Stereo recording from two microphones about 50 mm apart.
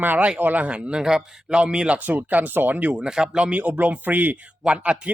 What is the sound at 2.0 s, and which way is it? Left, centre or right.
Speech, right.